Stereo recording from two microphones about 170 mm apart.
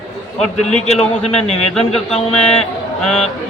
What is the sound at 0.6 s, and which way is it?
A man's voice, 40° left (ahead or behind).